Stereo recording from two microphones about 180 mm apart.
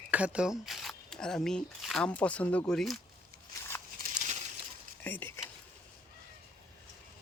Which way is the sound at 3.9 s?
45° right (ahead or behind).